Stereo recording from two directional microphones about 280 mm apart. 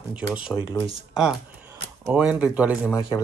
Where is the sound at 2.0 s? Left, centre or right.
Centre.